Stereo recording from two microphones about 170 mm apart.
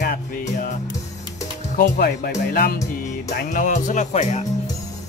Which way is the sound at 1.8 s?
65° left (ahead or behind).